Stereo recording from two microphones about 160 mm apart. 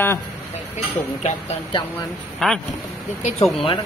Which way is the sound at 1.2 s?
40° left (ahead or behind).